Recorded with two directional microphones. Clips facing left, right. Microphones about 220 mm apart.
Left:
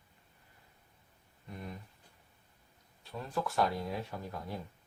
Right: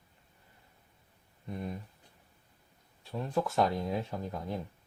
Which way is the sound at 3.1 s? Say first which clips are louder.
Right 5 dB; 25° right (ahead or behind).